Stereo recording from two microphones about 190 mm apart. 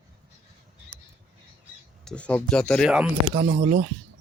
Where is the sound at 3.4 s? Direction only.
40° right (ahead or behind).